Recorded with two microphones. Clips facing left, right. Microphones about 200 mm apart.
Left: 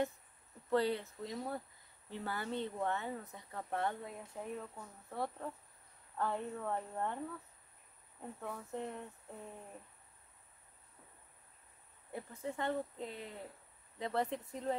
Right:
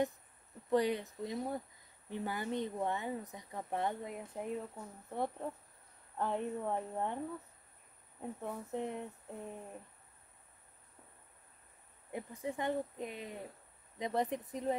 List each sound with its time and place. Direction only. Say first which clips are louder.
0.7 s speech: right 2 dB; 15° right (ahead or behind)
8.2 s speech: right 3 dB; 15° right (ahead or behind)
12.1 s speech: right 2 dB; 15° right (ahead or behind)